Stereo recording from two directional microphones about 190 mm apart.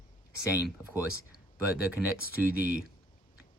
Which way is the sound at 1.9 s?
10° right (ahead or behind).